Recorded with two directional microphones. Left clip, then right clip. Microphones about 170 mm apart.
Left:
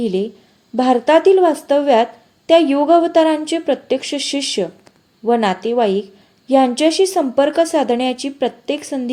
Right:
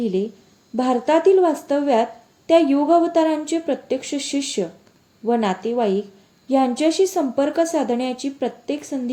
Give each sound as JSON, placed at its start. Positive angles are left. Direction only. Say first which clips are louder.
{"t": 0.0, "sound": "a woman's voice", "louder": "left 3 dB", "side_deg": 20}